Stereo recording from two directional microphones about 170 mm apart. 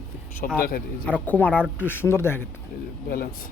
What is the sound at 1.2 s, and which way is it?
Speech, 10° left (ahead or behind).